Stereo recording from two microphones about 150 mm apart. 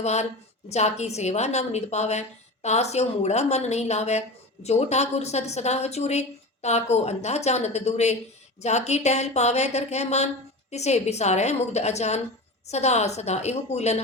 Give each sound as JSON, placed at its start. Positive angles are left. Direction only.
{"t": 0.0, "sound": "a woman's voice", "side_deg": 50}